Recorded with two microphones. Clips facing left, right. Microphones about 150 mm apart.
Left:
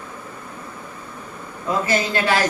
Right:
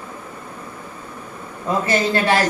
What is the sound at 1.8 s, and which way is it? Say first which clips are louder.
Speech: right 4 dB; 25° right (ahead or behind).